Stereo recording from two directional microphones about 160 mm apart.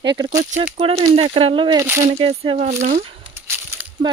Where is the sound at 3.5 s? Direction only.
15° right (ahead or behind).